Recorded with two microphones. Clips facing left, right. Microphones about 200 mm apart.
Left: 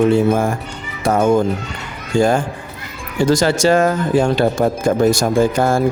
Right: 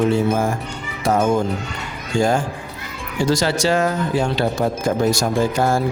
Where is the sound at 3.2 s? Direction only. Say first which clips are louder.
Left 5 dB; 50° left (ahead or behind).